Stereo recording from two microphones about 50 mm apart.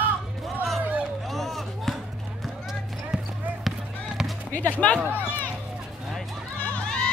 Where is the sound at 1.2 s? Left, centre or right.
Centre.